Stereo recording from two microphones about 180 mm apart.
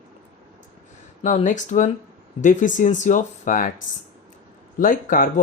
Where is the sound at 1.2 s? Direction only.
45° left (ahead or behind).